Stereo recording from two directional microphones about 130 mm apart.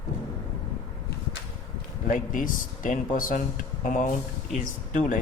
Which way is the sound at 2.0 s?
90° left.